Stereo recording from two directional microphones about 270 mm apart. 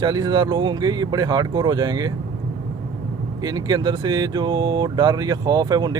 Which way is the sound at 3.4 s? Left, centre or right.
Centre.